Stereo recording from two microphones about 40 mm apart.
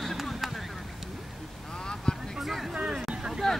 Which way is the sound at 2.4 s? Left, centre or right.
Centre.